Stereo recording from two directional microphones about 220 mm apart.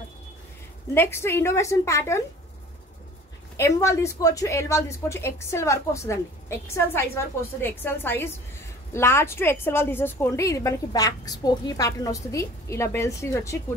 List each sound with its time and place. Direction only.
0.9 s speech: 10° left (ahead or behind)
3.5 s speech: 15° left (ahead or behind)